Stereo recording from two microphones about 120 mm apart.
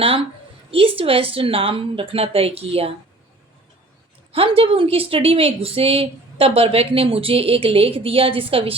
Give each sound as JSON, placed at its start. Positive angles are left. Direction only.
{"t": 0.7, "sound": "speech", "side_deg": -50}
{"t": 4.3, "sound": "speech", "side_deg": -50}